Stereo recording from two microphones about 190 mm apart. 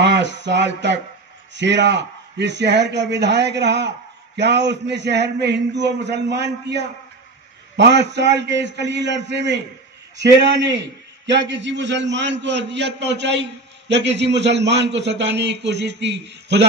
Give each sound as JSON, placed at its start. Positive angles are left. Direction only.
{"t": 0.0, "sound": "a man's voice", "side_deg": -65}
{"t": 10.6, "sound": "a man's voice", "side_deg": -70}